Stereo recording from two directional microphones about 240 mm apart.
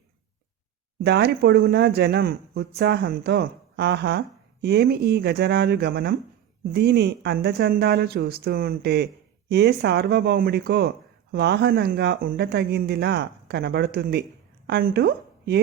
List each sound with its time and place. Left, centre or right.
1.0 s speech: right